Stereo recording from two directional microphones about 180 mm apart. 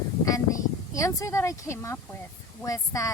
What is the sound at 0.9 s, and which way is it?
Speech, 15° left (ahead or behind).